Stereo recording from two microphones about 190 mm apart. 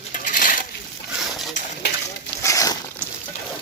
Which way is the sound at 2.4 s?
15° left (ahead or behind).